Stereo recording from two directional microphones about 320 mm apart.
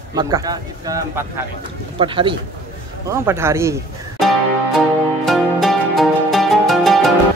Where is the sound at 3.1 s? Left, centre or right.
Centre.